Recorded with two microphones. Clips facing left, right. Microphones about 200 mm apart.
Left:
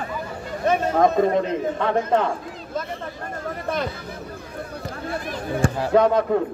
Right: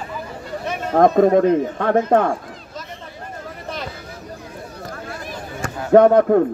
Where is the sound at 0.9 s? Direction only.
55° right (ahead or behind).